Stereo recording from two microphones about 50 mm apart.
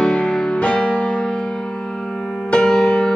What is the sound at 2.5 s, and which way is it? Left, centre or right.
Music, centre.